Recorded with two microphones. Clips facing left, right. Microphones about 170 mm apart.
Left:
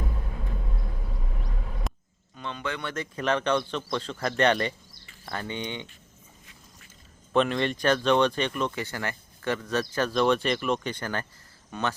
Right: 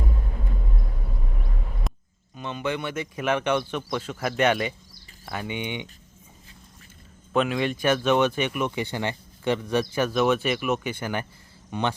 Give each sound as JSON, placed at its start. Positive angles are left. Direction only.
{"t": 1.9, "sound": "a sound", "side_deg": 0}
{"t": 2.3, "sound": "speech", "side_deg": -10}
{"t": 7.3, "sound": "speech", "side_deg": -5}